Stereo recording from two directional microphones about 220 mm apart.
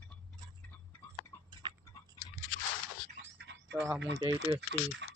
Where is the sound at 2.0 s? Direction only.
15° left (ahead or behind).